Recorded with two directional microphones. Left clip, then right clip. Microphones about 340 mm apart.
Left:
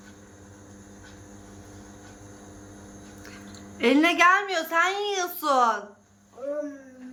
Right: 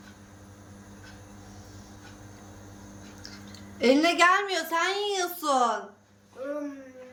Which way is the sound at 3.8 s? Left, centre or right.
Centre.